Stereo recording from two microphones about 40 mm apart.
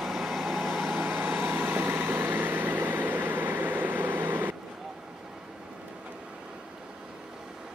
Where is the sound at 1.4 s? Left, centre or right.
Right.